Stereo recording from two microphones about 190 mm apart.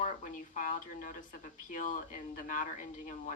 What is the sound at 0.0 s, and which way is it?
Speech, 40° left (ahead or behind).